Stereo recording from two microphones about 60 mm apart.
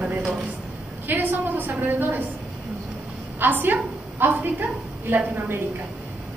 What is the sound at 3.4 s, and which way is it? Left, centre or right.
A woman's voice, right.